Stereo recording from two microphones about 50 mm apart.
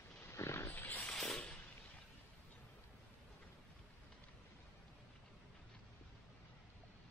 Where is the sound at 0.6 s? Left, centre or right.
Left.